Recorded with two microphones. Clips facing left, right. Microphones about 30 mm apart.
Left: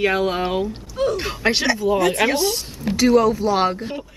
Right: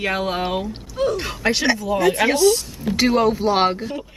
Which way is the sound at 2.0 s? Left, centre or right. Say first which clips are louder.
Right 1 dB; centre.